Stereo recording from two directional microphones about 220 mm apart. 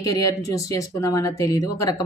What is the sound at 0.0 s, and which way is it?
Speech, 15° left (ahead or behind).